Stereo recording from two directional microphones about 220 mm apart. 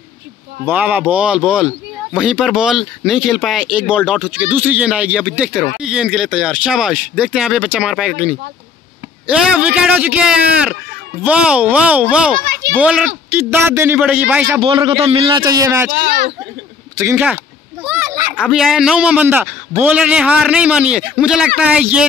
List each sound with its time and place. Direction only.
0.7 s a man's voice: 10° right (ahead or behind)
14.6 s a man's voice: 25° right (ahead or behind)
15.9 s speech: 55° right (ahead or behind)
16.9 s speech: 15° right (ahead or behind)
18.4 s speech: centre (ahead or behind)